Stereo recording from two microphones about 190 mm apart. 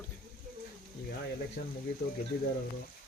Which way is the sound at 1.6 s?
55° left (ahead or behind).